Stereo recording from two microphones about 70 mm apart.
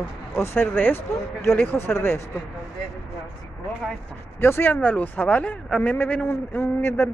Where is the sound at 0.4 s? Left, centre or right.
Left.